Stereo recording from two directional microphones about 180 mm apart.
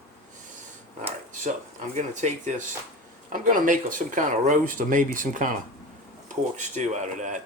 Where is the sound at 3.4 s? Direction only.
45° right (ahead or behind).